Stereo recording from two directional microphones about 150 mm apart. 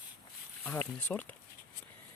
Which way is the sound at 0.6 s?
10° left (ahead or behind).